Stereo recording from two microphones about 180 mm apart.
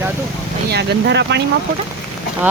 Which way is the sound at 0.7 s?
70° right (ahead or behind).